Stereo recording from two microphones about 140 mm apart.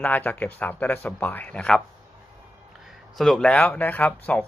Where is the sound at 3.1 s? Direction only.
Centre (ahead or behind).